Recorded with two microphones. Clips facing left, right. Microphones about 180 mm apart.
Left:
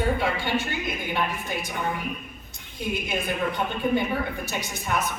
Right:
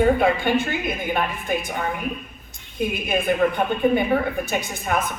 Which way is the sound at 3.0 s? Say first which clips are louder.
Right 10 dB; 55° right (ahead or behind).